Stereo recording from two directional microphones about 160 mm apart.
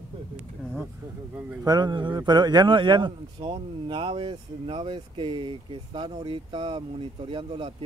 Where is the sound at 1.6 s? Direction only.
25° right (ahead or behind).